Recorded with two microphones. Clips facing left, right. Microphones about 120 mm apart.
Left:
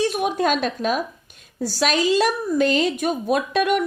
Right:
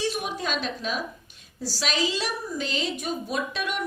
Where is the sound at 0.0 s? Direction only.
55° left (ahead or behind).